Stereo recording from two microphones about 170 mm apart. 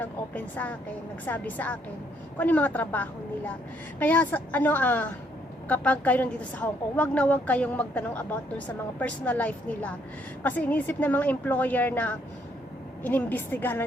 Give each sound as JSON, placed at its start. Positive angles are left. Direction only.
{"t": 0.0, "sound": "a woman's voice", "side_deg": 10}